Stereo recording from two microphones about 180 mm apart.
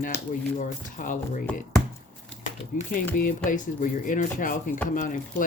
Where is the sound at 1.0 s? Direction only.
45° left (ahead or behind).